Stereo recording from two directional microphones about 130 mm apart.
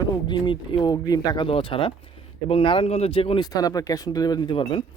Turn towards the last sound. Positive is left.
turn(degrees=40)  # may be behind; listen again after turning